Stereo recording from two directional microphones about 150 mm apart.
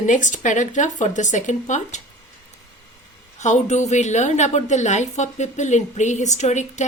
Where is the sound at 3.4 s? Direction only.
50° left (ahead or behind).